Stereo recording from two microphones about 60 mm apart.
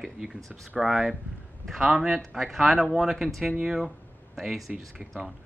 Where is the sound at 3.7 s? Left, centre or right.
Centre.